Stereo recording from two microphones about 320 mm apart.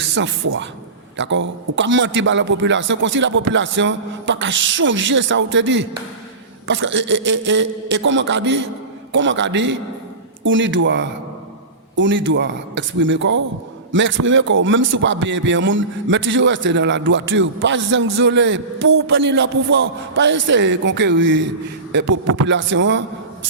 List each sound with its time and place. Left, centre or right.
0.1 s speech: right